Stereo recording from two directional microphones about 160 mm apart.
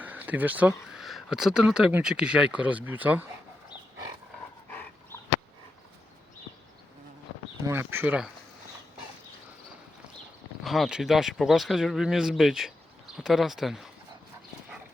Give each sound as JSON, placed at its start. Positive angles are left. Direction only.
{"t": 0.0, "sound": "speech", "side_deg": -10}
{"t": 7.7, "sound": "speech", "side_deg": -15}
{"t": 10.6, "sound": "speech", "side_deg": 0}